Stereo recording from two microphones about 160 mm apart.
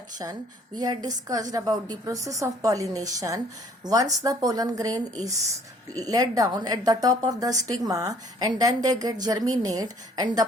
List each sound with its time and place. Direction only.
0.2 s a woman's voice: 25° right (ahead or behind)